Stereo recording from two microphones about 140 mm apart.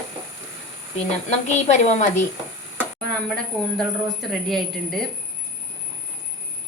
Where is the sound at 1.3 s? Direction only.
55° left (ahead or behind).